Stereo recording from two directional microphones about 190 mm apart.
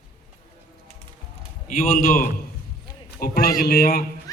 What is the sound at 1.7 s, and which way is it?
A man's voice, 45° left (ahead or behind).